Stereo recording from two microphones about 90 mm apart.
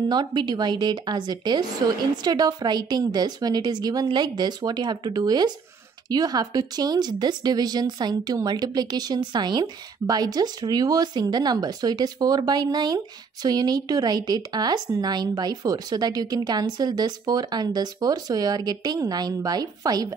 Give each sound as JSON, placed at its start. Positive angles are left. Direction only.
{"t": 0.1, "sound": "a woman's voice", "side_deg": -55}